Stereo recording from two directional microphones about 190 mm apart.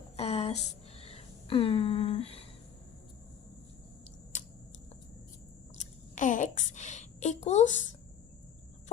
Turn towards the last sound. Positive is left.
turn(degrees=35)  # may be behind; listen again after turning